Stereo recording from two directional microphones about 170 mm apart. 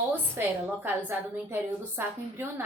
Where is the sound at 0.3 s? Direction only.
10° right (ahead or behind).